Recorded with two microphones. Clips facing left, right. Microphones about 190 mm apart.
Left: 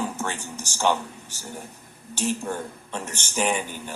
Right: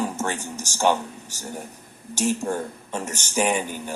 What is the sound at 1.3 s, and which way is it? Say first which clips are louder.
Speech: right 3 dB; 45° right (ahead or behind).